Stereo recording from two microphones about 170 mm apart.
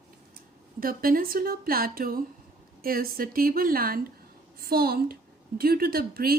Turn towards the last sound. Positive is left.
turn(degrees=-60)  # may be behind; listen again after turning